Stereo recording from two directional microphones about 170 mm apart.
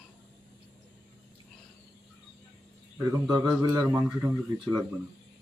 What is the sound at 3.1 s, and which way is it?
Speech, 20° right (ahead or behind).